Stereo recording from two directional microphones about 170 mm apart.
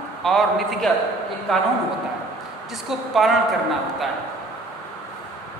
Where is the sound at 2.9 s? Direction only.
Centre (ahead or behind).